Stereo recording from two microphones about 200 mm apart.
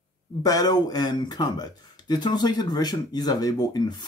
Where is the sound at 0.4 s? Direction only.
20° left (ahead or behind).